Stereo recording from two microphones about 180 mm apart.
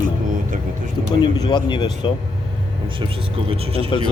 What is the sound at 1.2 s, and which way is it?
Speech, 25° left (ahead or behind).